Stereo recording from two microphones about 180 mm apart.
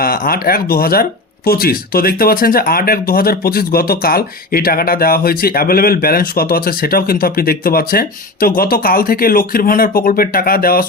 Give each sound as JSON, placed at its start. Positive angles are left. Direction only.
{"t": 0.0, "sound": "speech", "side_deg": 55}